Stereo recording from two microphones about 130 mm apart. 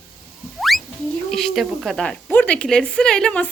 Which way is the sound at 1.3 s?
Centre (ahead or behind).